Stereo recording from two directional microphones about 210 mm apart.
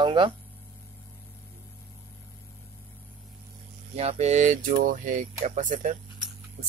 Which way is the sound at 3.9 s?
30° right (ahead or behind).